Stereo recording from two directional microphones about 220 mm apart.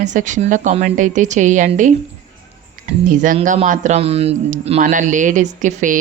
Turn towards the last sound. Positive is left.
turn(degrees=-35)  # may be behind; listen again after turning